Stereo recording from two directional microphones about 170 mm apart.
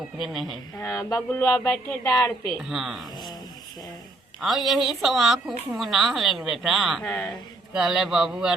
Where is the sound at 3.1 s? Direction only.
25° left (ahead or behind).